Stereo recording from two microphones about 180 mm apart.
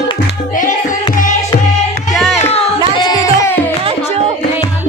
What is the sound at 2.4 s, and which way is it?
Music, 35° left (ahead or behind).